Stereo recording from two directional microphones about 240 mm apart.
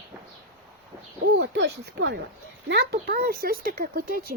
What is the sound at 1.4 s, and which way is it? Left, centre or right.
Speech, right.